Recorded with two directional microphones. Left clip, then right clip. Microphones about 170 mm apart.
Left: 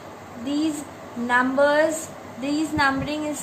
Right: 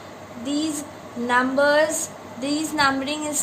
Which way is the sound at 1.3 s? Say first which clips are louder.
Even; 35° right (ahead or behind).